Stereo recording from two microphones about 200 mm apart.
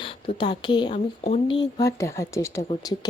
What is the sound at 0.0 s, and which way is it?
Speech, 25° left (ahead or behind).